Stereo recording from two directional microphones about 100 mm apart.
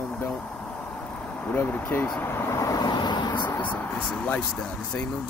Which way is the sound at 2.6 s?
40° left (ahead or behind).